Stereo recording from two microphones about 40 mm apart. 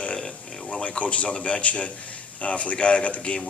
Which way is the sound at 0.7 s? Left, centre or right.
Left.